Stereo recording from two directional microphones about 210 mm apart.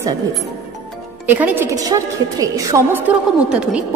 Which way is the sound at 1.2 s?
10° right (ahead or behind).